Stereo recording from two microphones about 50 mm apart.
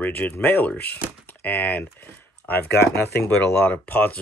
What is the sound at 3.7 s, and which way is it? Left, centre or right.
Speech, left.